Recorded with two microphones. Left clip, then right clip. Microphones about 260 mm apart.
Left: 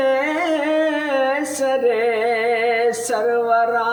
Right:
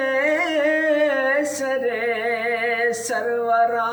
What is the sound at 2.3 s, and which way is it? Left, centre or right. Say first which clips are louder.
Music: left 4 dB; right.